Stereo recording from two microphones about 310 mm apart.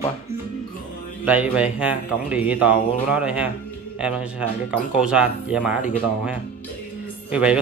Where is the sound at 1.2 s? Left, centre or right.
Centre.